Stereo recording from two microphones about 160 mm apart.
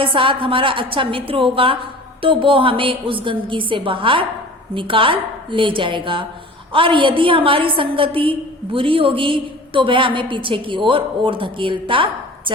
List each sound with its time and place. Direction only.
0.0 s a woman's voice: 35° right (ahead or behind)